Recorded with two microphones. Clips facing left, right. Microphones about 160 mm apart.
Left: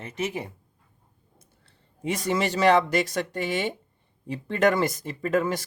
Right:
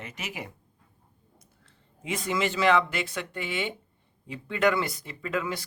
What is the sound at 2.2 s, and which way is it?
Speech, 40° left (ahead or behind).